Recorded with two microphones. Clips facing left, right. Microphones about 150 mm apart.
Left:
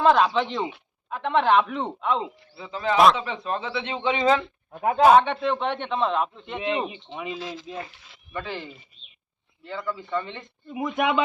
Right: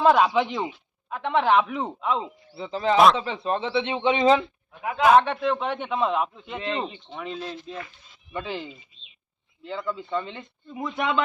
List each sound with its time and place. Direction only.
0.0 s a man's voice: 5° right (ahead or behind)
2.6 s a man's voice: 30° right (ahead or behind)
4.9 s speech: 35° left (ahead or behind)
5.1 s a man's voice: centre (ahead or behind)
6.6 s speech: 15° left (ahead or behind)
7.3 s speech: 90° left
8.3 s speech: 15° right (ahead or behind)
9.6 s speech: 20° right (ahead or behind)
10.7 s speech: 10° left (ahead or behind)